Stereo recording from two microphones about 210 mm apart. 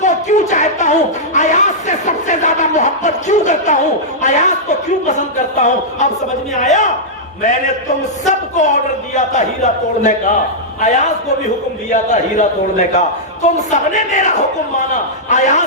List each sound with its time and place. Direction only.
0.0 s a sound: 35° left (ahead or behind)
6.6 s a man's voice: 35° left (ahead or behind)
11.9 s a man's voice: 35° left (ahead or behind)